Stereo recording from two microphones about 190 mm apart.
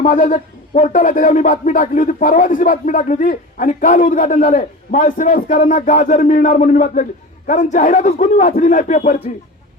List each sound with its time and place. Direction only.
0.0 s a man's voice: 50° left (ahead or behind)